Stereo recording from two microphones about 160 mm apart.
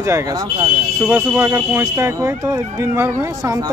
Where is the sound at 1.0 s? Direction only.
10° right (ahead or behind).